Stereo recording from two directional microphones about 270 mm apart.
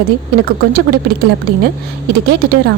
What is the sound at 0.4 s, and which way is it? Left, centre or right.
Speech, right.